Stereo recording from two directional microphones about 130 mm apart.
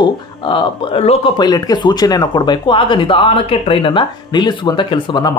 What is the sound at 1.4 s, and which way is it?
Speech, 30° left (ahead or behind).